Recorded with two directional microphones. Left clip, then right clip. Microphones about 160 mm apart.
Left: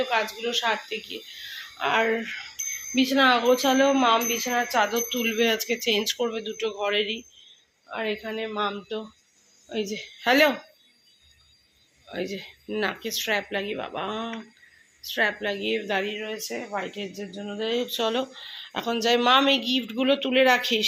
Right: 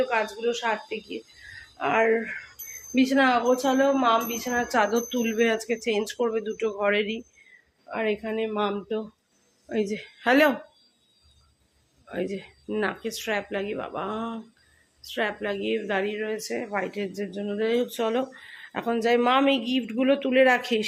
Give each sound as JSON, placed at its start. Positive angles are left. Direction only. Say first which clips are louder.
{"t": 0.0, "sound": "speech", "louder": "right 1 dB", "side_deg": -5}
{"t": 3.2, "sound": "speech", "louder": "left 2 dB", "side_deg": 0}
{"t": 3.6, "sound": "speech", "louder": "left 1 dB", "side_deg": 20}
{"t": 4.7, "sound": "speech", "louder": "even", "side_deg": -25}
{"t": 6.4, "sound": "speech", "louder": "right 2 dB", "side_deg": -15}
{"t": 12.0, "sound": "speech", "louder": "right 1 dB", "side_deg": -10}
{"t": 17.8, "sound": "speech", "louder": "even", "side_deg": -10}